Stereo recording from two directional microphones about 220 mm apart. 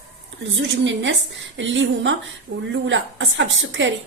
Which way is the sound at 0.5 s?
55° right (ahead or behind).